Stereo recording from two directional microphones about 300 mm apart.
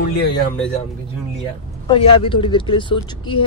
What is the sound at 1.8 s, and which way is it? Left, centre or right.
Speech, centre.